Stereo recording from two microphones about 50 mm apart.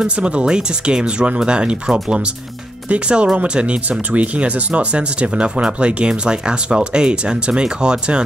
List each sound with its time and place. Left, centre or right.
0.0 s speech: right